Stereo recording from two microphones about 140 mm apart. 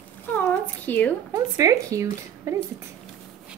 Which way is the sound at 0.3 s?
15° left (ahead or behind).